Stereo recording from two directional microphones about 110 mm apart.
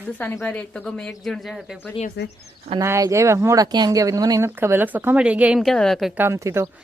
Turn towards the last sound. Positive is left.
turn(degrees=-25)  # may be behind; listen again after turning